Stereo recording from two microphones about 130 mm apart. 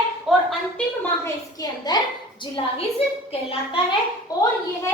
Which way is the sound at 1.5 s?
30° left (ahead or behind).